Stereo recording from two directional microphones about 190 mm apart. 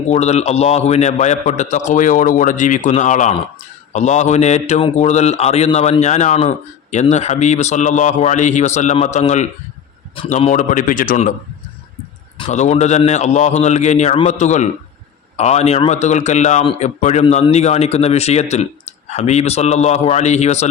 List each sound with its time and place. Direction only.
0.1 s a man's voice: 35° left (ahead or behind)
12.5 s a man's voice: 35° left (ahead or behind)